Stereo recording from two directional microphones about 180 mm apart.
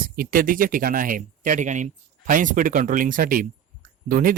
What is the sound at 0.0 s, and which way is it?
Speech, 50° right (ahead or behind).